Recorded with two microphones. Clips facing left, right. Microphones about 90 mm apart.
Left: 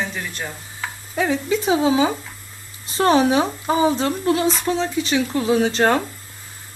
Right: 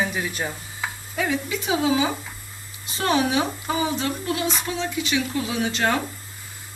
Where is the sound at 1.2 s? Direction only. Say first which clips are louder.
Left 5 dB; 30° left (ahead or behind).